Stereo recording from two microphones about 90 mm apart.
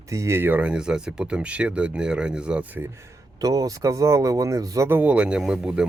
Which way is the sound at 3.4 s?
45° right (ahead or behind).